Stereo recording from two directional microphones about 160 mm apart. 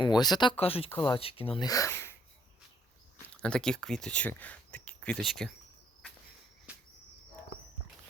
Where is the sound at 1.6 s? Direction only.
20° left (ahead or behind).